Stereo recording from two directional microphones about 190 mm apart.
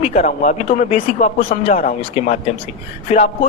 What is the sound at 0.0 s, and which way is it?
Speech, 35° left (ahead or behind).